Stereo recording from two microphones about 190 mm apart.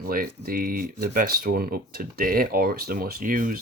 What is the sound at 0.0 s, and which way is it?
Speech, 50° right (ahead or behind).